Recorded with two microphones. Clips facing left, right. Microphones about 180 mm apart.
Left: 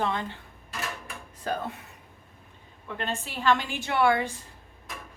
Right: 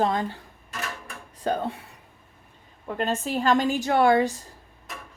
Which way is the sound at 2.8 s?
40° right (ahead or behind).